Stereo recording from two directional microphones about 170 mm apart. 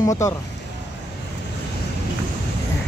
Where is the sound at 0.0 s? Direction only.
20° left (ahead or behind).